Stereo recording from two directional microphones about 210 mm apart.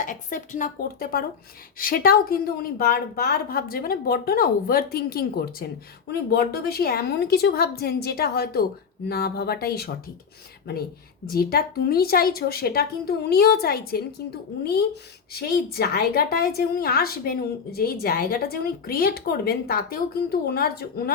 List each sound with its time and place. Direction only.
0.0 s a woman's voice: 40° left (ahead or behind)
11.3 s a woman's voice: 45° left (ahead or behind)